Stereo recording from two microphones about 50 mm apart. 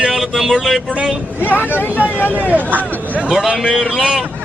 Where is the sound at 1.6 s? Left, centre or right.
Left.